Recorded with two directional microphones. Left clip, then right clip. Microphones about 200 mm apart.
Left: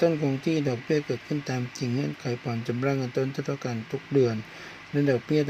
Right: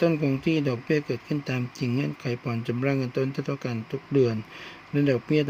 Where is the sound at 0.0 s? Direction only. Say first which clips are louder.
Even; 25° right (ahead or behind).